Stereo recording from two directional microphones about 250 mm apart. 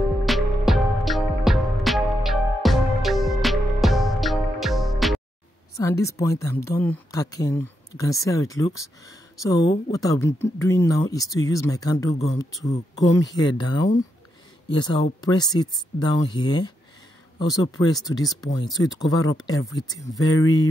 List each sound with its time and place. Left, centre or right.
0.2 s music: centre
5.8 s speech: centre